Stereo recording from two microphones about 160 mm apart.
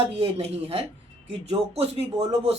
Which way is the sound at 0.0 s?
40° right (ahead or behind).